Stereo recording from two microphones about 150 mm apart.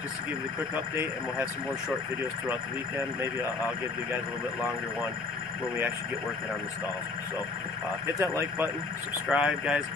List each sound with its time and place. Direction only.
8.2 s speech: 20° right (ahead or behind)
9.3 s speech: 5° right (ahead or behind)